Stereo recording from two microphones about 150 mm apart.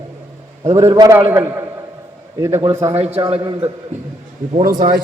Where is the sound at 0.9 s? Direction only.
20° right (ahead or behind).